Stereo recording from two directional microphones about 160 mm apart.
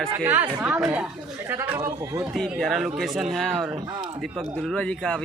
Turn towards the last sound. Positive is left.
turn(degrees=5)  # may be behind; listen again after turning